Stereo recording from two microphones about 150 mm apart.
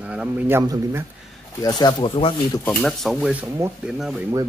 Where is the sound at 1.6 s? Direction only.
25° left (ahead or behind).